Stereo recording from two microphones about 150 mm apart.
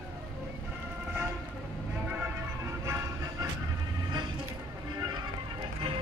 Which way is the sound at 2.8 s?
20° right (ahead or behind).